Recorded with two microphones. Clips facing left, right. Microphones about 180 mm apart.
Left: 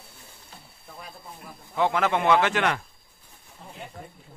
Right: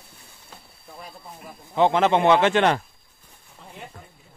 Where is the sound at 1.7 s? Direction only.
25° right (ahead or behind).